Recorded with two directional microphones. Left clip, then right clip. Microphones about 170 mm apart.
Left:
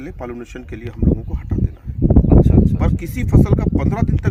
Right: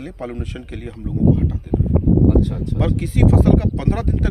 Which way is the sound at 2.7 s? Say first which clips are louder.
Right 2 dB; 10° right (ahead or behind).